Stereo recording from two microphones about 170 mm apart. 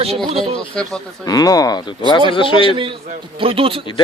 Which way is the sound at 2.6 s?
30° right (ahead or behind).